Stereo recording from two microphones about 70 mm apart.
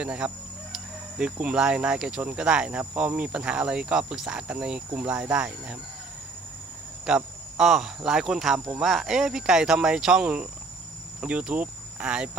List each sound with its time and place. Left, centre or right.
0.0 s speech: centre
7.1 s speech: centre